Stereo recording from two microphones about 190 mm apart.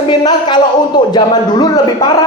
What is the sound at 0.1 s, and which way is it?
A man's voice, 25° left (ahead or behind).